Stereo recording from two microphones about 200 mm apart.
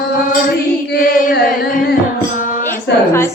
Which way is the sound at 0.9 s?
45° left (ahead or behind).